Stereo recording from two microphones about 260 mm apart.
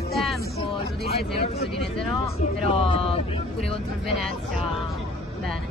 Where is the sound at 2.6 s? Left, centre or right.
Left.